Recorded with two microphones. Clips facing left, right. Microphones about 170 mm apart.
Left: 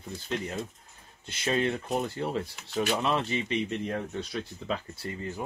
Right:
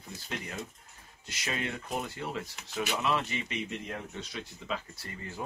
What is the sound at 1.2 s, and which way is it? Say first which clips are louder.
Speech: left 8 dB; 30° left (ahead or behind).